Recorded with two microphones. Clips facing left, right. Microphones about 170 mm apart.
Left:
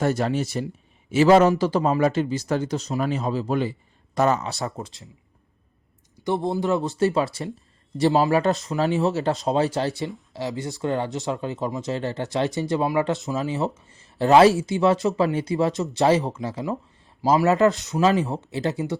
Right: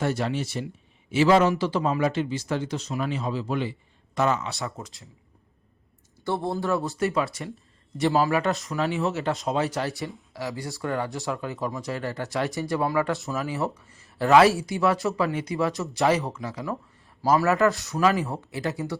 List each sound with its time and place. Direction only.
0.0 s speech: 40° left (ahead or behind)
6.2 s speech: 15° left (ahead or behind)